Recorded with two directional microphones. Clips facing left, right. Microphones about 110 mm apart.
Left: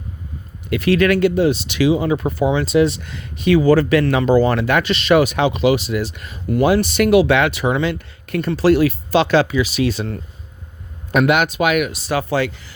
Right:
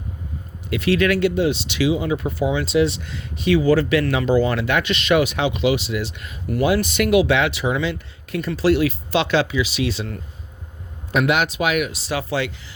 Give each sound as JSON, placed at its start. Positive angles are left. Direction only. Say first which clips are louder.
{"t": 0.7, "sound": "speech", "louder": "left 3 dB", "side_deg": 50}